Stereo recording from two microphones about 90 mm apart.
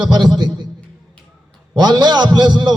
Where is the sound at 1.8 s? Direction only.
50° right (ahead or behind).